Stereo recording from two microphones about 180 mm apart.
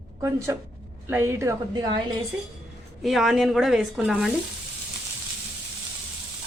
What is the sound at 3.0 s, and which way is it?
Speech, centre (ahead or behind).